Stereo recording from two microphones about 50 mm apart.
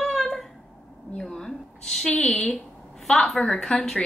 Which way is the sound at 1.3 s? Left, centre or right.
Centre.